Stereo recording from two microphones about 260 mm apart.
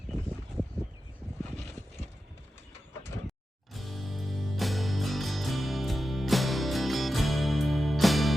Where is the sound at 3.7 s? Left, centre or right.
Centre.